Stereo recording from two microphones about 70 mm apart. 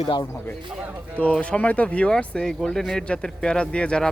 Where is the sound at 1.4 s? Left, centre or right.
Centre.